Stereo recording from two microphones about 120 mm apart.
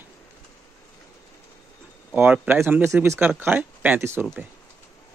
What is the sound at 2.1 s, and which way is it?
A man's voice, 15° right (ahead or behind).